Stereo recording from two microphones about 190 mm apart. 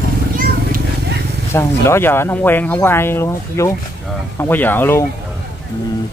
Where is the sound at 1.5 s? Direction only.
15° left (ahead or behind).